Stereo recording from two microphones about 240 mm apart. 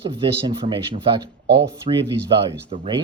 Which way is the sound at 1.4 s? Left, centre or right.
Right.